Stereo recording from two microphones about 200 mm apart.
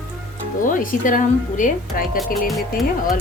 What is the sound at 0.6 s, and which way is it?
Speech, 40° left (ahead or behind).